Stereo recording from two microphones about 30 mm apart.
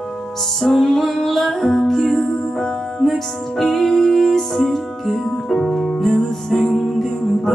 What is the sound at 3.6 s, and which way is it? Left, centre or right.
Music, centre.